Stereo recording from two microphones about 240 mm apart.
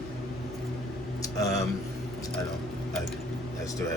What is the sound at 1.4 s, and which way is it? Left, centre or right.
Speech, centre.